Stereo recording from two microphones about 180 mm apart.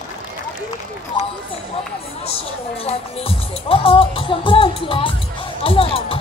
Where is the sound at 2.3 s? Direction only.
35° left (ahead or behind).